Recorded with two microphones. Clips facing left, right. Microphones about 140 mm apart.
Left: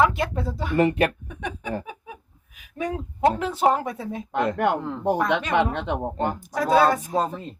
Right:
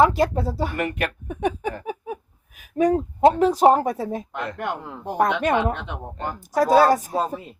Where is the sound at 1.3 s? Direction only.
45° right (ahead or behind).